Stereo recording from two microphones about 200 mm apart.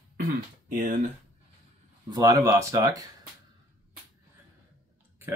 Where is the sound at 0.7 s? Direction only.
45° right (ahead or behind).